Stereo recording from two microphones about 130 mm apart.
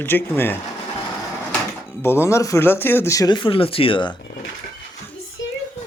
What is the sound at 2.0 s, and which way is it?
Speech, 20° left (ahead or behind).